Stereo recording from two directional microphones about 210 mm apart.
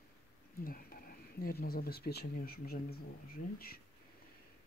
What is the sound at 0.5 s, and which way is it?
Speech, 45° left (ahead or behind).